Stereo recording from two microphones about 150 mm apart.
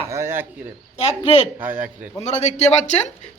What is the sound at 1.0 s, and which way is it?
Speech, 45° left (ahead or behind).